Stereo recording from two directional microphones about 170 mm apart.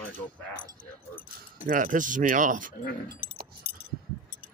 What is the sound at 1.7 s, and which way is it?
Speech, 50° right (ahead or behind).